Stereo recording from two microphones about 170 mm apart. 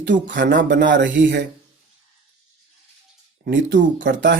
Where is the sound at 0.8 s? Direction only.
90° right.